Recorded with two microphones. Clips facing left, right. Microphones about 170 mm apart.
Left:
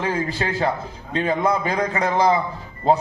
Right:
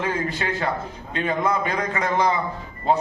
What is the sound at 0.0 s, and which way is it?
A man's voice, 35° left (ahead or behind).